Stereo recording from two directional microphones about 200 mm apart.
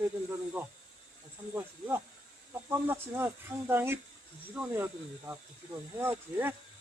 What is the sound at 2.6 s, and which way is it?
Speech, 10° right (ahead or behind).